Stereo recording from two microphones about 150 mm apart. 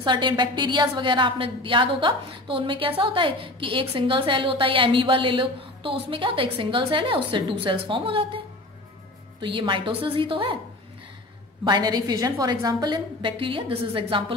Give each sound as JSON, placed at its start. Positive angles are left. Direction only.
{"t": 0.0, "sound": "a woman's voice", "side_deg": -30}
{"t": 9.4, "sound": "a woman's voice", "side_deg": -35}
{"t": 11.6, "sound": "a woman's voice", "side_deg": -30}